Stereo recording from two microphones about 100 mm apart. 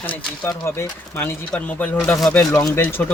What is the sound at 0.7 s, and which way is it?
Speech, 25° left (ahead or behind).